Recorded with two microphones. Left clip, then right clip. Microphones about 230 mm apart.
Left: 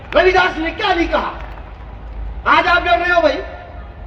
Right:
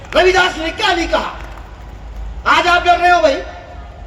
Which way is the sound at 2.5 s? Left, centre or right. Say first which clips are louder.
Right 1 dB; right.